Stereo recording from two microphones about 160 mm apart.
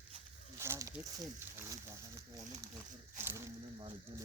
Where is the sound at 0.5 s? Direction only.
15° right (ahead or behind).